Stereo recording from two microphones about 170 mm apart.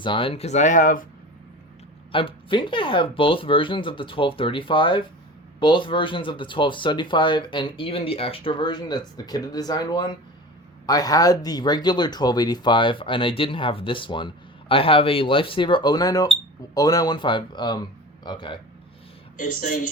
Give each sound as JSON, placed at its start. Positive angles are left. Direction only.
{"t": 0.0, "sound": "speech", "side_deg": 30}
{"t": 2.1, "sound": "speech", "side_deg": 30}
{"t": 19.4, "sound": "speech", "side_deg": 50}